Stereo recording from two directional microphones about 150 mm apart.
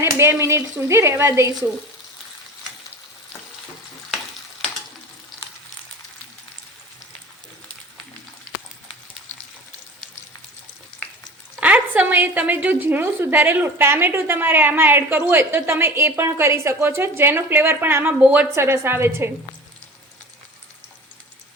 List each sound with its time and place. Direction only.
0.0 s a woman's voice: 15° right (ahead or behind)
5.3 s frying: centre (ahead or behind)
11.6 s a woman's voice: 10° right (ahead or behind)